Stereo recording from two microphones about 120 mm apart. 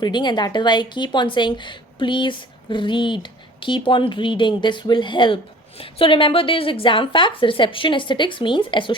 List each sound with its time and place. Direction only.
0.0 s a woman's voice: 40° left (ahead or behind)